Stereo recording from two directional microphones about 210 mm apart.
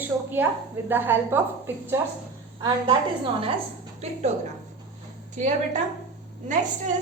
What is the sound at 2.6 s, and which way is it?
A woman's voice, 25° right (ahead or behind).